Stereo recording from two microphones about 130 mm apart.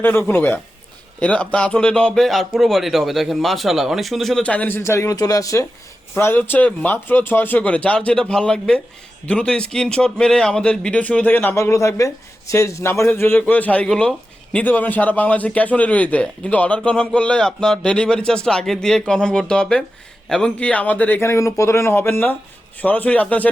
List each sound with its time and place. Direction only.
0.0 s a man's voice: 15° left (ahead or behind)